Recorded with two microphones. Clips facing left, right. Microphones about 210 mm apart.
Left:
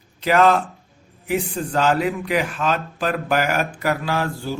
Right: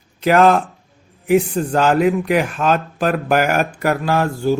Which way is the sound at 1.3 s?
50° right (ahead or behind).